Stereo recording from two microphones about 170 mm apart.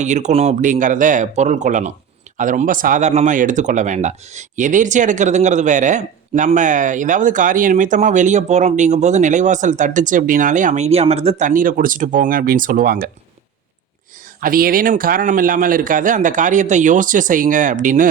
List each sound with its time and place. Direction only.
0.0 s speech: 45° right (ahead or behind)
14.4 s speech: 55° right (ahead or behind)